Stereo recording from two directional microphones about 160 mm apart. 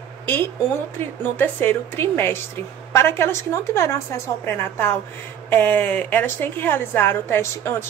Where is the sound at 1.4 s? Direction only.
10° left (ahead or behind).